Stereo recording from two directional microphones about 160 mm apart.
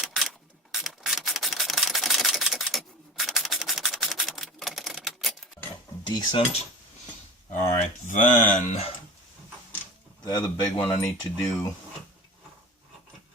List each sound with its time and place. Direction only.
0.0 s rub: centre (ahead or behind)
6.1 s speech: 30° left (ahead or behind)
8.0 s speech: 55° left (ahead or behind)
10.2 s speech: 25° left (ahead or behind)